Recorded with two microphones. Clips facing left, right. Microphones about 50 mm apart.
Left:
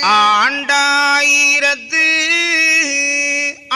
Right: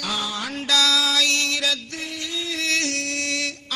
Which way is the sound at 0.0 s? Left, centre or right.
Left.